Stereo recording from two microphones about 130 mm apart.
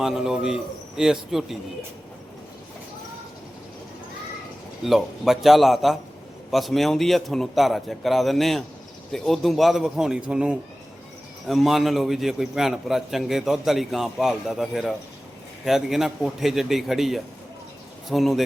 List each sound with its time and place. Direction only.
0.0 s a man's voice: 5° right (ahead or behind)
4.9 s a man's voice: centre (ahead or behind)